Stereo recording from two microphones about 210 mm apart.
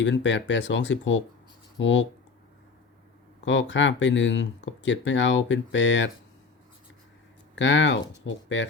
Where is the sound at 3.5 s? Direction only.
60° left (ahead or behind).